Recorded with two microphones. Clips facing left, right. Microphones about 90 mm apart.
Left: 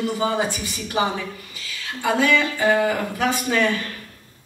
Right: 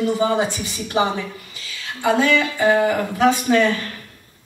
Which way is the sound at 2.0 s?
25° right (ahead or behind).